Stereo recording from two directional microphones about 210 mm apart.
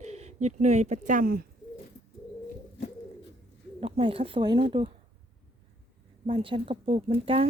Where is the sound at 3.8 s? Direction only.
25° right (ahead or behind).